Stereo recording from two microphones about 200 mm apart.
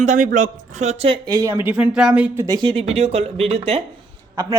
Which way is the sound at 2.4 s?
20° right (ahead or behind).